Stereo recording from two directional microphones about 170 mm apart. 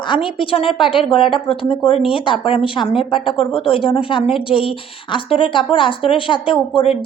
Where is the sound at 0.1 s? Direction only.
30° left (ahead or behind).